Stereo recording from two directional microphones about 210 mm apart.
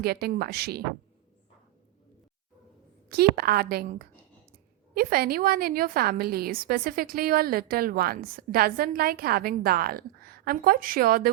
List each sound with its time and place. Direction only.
0.0 s a woman's voice: 50° right (ahead or behind)
3.1 s a woman's voice: 45° right (ahead or behind)